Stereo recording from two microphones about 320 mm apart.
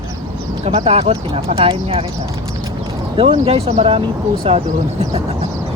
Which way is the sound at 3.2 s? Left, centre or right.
Centre.